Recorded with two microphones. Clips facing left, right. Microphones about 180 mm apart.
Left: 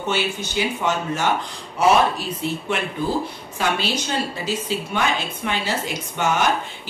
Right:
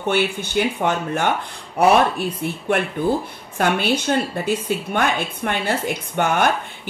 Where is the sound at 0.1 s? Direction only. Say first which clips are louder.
Right 4 dB; 55° right (ahead or behind).